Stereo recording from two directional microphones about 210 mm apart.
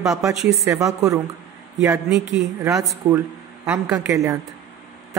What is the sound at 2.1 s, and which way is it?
A man's voice, 10° right (ahead or behind).